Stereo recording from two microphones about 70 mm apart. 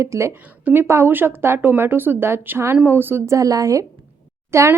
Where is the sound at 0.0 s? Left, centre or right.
Right.